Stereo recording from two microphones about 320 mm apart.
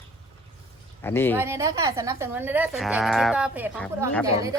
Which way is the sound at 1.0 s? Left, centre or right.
Centre.